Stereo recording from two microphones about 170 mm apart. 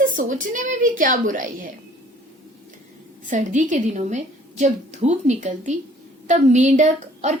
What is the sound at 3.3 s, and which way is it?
A woman's voice, 45° right (ahead or behind).